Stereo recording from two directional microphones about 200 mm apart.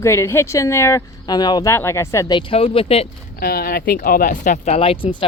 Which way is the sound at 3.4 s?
45° left (ahead or behind).